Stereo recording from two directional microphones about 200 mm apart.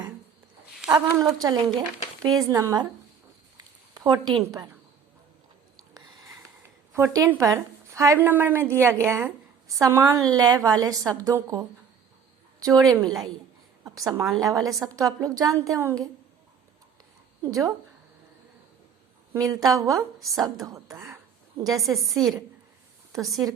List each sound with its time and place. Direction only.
0.9 s a woman's voice: 20° right (ahead or behind)
3.9 s a woman's voice: 20° right (ahead or behind)
6.9 s a woman's voice: 15° right (ahead or behind)
12.5 s a sound: 20° right (ahead or behind)
12.9 s a woman's voice: 20° right (ahead or behind)
17.4 s a woman's voice: 15° right (ahead or behind)
19.3 s a woman's voice: 20° right (ahead or behind)
20.1 s a woman's voice: centre (ahead or behind)
20.7 s a woman's voice: 15° right (ahead or behind)
21.7 s a woman's voice: centre (ahead or behind)